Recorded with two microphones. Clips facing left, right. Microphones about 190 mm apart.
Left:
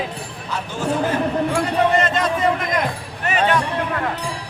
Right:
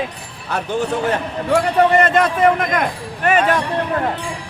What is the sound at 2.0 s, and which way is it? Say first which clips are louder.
Speech: right 5 dB; 60° right (ahead or behind).